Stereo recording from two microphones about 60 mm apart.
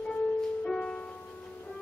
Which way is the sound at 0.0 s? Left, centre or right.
Centre.